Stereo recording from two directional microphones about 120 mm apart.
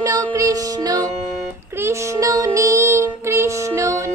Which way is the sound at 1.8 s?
25° right (ahead or behind).